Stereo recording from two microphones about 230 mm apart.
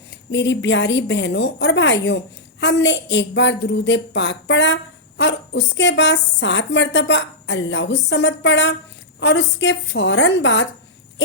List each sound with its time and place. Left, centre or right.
0.3 s a woman's voice: left